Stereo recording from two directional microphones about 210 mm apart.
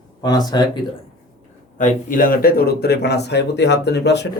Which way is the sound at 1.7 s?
40° left (ahead or behind).